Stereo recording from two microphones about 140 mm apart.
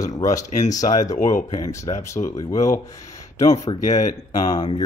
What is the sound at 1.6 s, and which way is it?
Speech, 25° left (ahead or behind).